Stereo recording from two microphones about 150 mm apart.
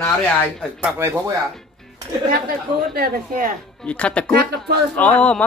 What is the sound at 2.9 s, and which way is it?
Speech, 65° right (ahead or behind).